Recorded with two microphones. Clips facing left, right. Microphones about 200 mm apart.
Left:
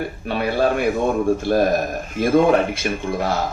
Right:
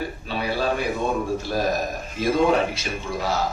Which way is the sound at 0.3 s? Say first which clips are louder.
Left 6 dB; 55° left (ahead or behind).